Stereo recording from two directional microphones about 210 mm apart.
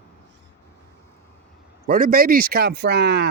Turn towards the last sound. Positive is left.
turn(degrees=-50)  # may be behind; listen again after turning